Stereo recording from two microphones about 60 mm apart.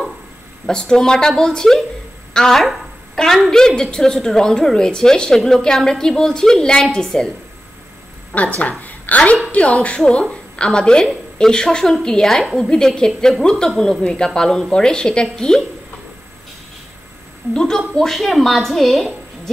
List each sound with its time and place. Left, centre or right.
0.7 s a woman's voice: centre
8.3 s a woman's voice: left
17.6 s speech: centre